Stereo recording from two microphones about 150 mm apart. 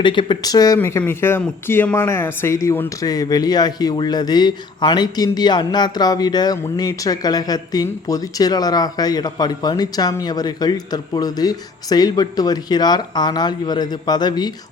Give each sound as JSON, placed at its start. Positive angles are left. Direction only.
{"t": 0.0, "sound": "speech", "side_deg": 35}